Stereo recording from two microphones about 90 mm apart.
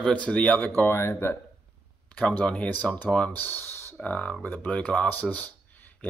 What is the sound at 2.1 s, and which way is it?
Speech, 15° left (ahead or behind).